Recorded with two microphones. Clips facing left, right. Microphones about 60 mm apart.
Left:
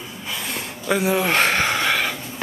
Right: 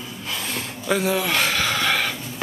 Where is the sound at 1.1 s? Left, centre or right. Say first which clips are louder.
Left 3 dB; left.